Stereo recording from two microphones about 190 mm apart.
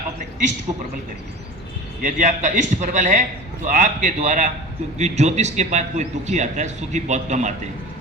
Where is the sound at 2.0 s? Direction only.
40° right (ahead or behind).